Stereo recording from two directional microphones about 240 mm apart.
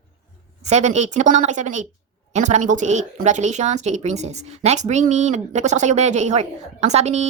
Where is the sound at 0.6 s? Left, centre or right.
Right.